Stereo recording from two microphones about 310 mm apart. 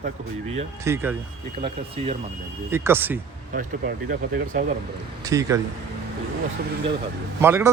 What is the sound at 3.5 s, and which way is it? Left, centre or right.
Speech, right.